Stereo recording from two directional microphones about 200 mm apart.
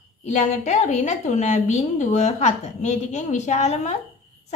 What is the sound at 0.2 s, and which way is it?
A woman's voice, 35° left (ahead or behind).